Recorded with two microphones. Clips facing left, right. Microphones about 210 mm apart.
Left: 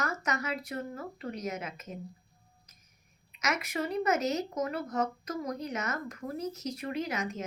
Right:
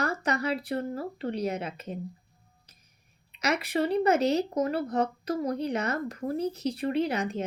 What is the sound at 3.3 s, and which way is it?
A woman's voice, 30° right (ahead or behind).